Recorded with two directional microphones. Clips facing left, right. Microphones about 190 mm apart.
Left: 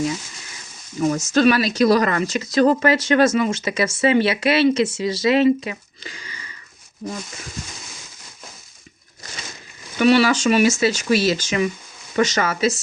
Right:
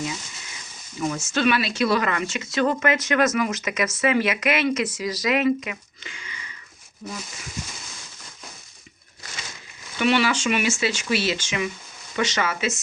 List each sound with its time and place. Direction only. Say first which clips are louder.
0.9 s speech: left 7 dB; 40° left (ahead or behind)
10.0 s speech: left 6 dB; 40° left (ahead or behind)